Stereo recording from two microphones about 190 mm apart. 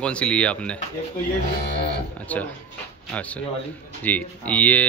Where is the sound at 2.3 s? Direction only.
10° left (ahead or behind).